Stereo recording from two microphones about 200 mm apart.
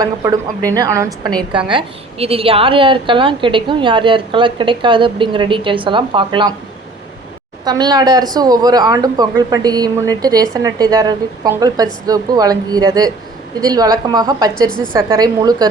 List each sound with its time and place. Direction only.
0.0 s a woman's voice: 15° right (ahead or behind)
1.7 s speech: 30° right (ahead or behind)
7.6 s a woman's voice: 20° right (ahead or behind)